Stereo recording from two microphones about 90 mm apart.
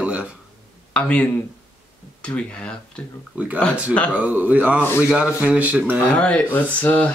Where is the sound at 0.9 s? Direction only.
15° left (ahead or behind).